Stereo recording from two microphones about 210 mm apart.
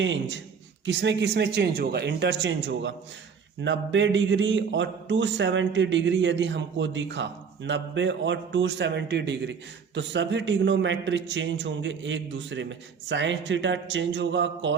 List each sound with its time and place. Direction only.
0.0 s speech: 60° right (ahead or behind)